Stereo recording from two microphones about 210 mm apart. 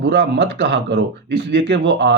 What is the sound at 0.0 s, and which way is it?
Speech, 55° right (ahead or behind).